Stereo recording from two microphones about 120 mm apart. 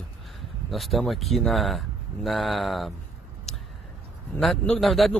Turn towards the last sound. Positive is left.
turn(degrees=0)  # may be behind; listen again after turning